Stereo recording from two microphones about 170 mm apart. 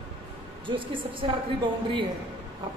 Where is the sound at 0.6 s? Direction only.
30° right (ahead or behind).